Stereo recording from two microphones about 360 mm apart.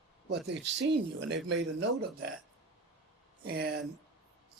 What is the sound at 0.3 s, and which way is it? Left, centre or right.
Speech, right.